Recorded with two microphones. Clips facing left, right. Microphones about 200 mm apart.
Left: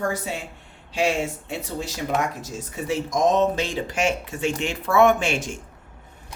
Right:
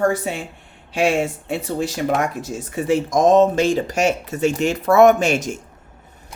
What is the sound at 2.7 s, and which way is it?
Speech, 50° right (ahead or behind).